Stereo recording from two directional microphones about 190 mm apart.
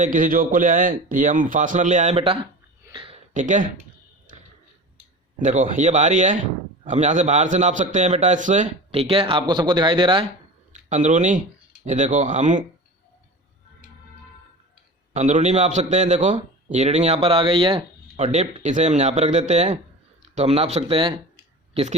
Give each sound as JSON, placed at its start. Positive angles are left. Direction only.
{"t": 0.0, "sound": "a man's voice", "side_deg": -45}
{"t": 2.8, "sound": "a sound", "side_deg": -25}
{"t": 3.3, "sound": "a man's voice", "side_deg": -40}
{"t": 5.4, "sound": "a man's voice", "side_deg": -40}
{"t": 10.7, "sound": "a man's voice", "side_deg": -40}
{"t": 15.1, "sound": "a man's voice", "side_deg": -40}